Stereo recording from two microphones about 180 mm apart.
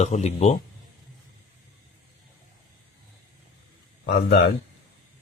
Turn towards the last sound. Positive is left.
turn(degrees=70)  # may be behind; listen again after turning